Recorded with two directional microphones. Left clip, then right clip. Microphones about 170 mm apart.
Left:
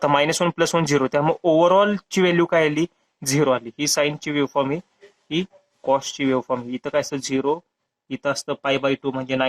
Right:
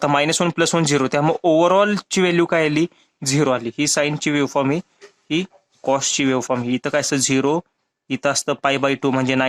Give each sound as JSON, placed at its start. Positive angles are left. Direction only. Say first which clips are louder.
{"t": 0.0, "sound": "speech", "louder": "right 1 dB", "side_deg": -45}